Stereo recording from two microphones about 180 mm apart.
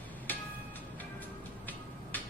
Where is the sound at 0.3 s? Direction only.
10° left (ahead or behind).